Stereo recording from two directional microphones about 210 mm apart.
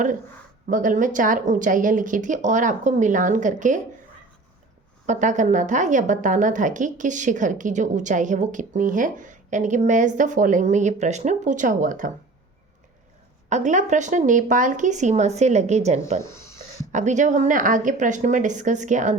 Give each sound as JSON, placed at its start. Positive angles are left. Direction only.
{"t": 0.7, "sound": "a woman's voice", "side_deg": -40}
{"t": 5.0, "sound": "a woman's voice", "side_deg": -35}
{"t": 13.5, "sound": "a woman's voice", "side_deg": -35}